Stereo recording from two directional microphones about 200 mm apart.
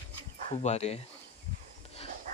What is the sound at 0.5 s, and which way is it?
Speech, 30° left (ahead or behind).